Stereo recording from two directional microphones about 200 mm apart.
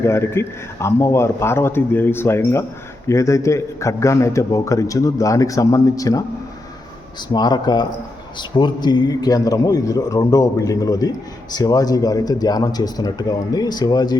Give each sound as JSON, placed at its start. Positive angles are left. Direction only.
{"t": 0.0, "sound": "a man's voice", "side_deg": 15}
{"t": 7.3, "sound": "a man's voice", "side_deg": 20}